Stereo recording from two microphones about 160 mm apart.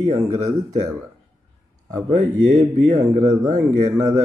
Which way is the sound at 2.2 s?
45° right (ahead or behind).